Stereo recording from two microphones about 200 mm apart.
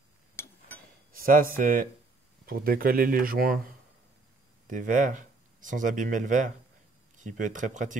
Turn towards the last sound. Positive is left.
turn(degrees=-40)  # may be behind; listen again after turning